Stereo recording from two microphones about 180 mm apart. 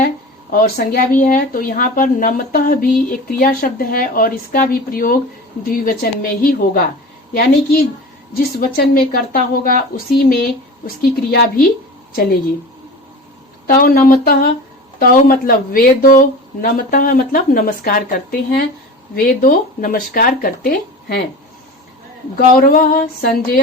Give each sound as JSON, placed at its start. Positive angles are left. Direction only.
{"t": 0.5, "sound": "a woman's voice", "side_deg": 55}
{"t": 10.8, "sound": "a woman's voice", "side_deg": 60}
{"t": 13.7, "sound": "speech", "side_deg": 50}
{"t": 22.6, "sound": "speech", "side_deg": 50}